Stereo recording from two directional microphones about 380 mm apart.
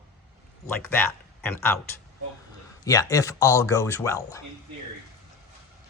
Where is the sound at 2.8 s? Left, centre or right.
Centre.